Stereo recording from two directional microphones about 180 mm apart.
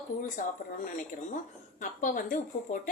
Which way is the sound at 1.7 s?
45° left (ahead or behind).